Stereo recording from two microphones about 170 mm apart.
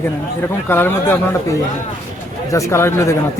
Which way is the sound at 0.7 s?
15° left (ahead or behind).